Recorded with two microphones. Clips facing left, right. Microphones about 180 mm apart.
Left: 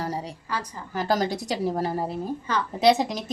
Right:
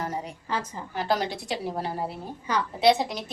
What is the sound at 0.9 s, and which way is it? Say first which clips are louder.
Speech: left 3 dB; 40° left (ahead or behind).